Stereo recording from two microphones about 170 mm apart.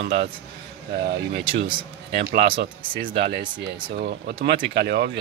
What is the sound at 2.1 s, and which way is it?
Speech, 75° right (ahead or behind).